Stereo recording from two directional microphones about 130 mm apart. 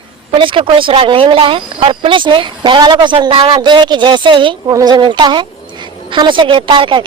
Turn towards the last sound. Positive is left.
turn(degrees=-40)  # may be behind; listen again after turning